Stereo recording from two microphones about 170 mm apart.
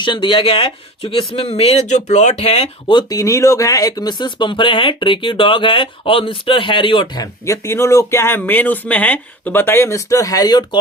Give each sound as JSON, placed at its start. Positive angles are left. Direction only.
{"t": 0.0, "sound": "speech", "side_deg": 30}
{"t": 3.0, "sound": "speech", "side_deg": 20}